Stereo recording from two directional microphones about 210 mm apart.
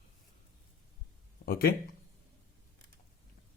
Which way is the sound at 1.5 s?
45° left (ahead or behind).